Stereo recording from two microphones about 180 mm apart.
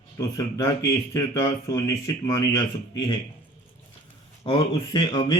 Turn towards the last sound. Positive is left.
turn(degrees=25)  # may be behind; listen again after turning